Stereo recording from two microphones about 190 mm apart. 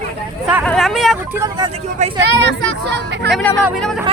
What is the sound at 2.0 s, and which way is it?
Speech, 40° right (ahead or behind).